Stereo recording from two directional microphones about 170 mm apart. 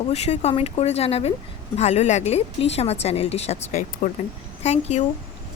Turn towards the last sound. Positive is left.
turn(degrees=40)  # may be behind; listen again after turning